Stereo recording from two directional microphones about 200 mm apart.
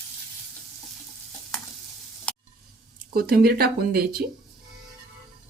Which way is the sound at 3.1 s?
50° right (ahead or behind).